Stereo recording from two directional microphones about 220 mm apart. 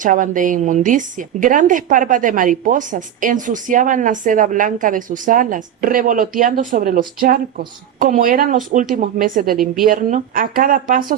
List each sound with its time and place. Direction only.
0.0 s a woman's voice: 35° right (ahead or behind)